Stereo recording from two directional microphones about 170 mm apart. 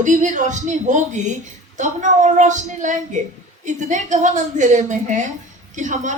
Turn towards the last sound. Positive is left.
turn(degrees=-45)  # may be behind; listen again after turning